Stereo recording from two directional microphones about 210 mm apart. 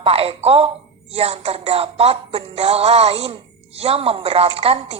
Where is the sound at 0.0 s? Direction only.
25° right (ahead or behind).